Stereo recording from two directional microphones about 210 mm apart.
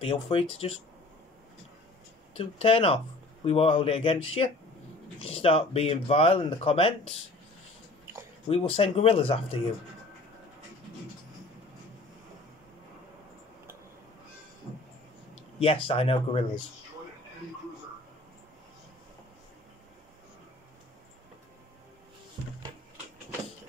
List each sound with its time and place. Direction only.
0.0 s speech: 25° left (ahead or behind)
2.3 s speech: 25° left (ahead or behind)
8.5 s speech: 30° left (ahead or behind)
15.6 s speech: 25° left (ahead or behind)